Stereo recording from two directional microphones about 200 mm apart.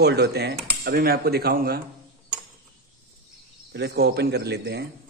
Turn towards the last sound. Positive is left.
turn(degrees=-55)  # may be behind; listen again after turning